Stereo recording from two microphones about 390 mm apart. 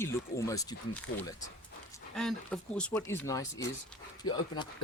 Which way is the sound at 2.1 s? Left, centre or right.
Centre.